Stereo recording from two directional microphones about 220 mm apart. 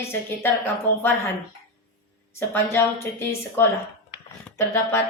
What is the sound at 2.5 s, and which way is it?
Speech, 10° left (ahead or behind).